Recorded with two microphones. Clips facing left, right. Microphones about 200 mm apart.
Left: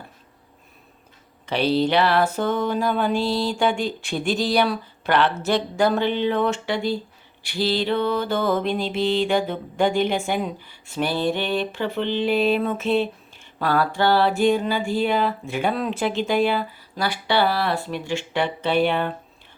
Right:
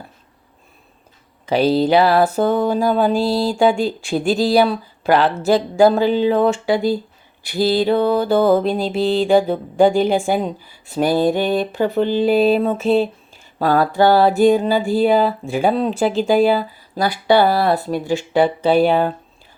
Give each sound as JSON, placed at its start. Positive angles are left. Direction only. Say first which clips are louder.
{"t": 1.5, "sound": "music", "louder": "right 5 dB", "side_deg": -40}
{"t": 5.8, "sound": "music", "louder": "right 7 dB", "side_deg": -35}